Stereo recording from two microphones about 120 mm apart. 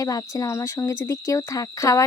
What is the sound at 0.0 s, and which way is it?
Speech, 30° left (ahead or behind).